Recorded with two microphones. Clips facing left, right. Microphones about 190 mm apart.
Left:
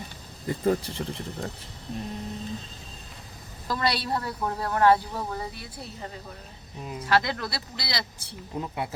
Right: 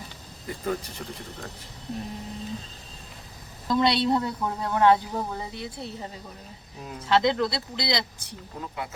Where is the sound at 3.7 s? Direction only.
25° right (ahead or behind).